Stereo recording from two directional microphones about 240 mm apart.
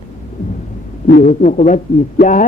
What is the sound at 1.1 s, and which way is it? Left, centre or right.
Speech, left.